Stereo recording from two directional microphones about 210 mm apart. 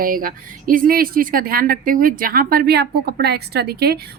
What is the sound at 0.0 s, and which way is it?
Speech, 40° right (ahead or behind).